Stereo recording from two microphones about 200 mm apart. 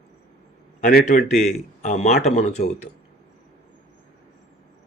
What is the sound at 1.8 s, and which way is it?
Speech, 35° left (ahead or behind).